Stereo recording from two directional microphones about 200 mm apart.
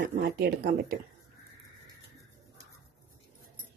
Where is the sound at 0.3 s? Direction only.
55° right (ahead or behind).